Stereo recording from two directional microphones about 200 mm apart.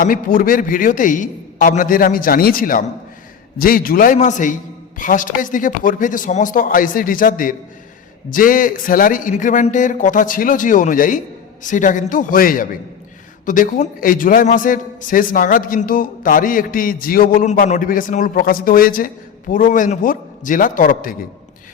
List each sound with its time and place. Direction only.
0.0 s a man's voice: 45° left (ahead or behind)